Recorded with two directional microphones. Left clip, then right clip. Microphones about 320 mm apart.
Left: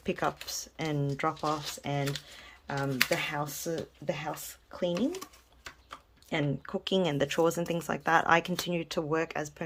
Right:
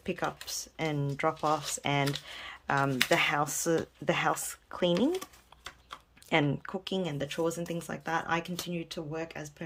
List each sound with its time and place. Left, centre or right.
0.0 s speech: centre